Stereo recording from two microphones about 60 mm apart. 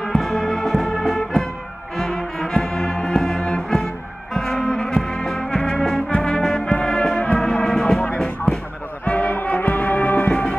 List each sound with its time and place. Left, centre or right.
0.0 s music: centre
9.0 s music: left